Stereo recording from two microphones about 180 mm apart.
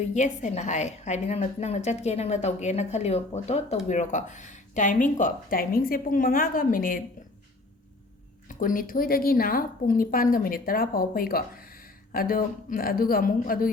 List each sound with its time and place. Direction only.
0.1 s a woman's voice: 40° left (ahead or behind)
8.4 s a woman's voice: 50° left (ahead or behind)